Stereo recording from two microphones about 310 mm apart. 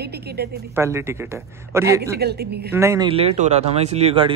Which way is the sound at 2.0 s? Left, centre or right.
Right.